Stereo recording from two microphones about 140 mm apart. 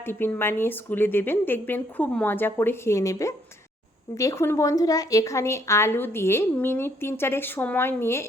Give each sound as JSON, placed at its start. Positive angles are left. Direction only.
{"t": 0.0, "sound": "a woman's voice", "side_deg": 15}